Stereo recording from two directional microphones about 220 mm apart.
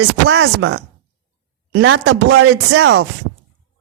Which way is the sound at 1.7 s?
50° right (ahead or behind).